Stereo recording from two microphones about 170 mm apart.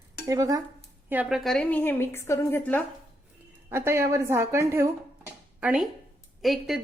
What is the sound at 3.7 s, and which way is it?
A woman's voice, 15° right (ahead or behind).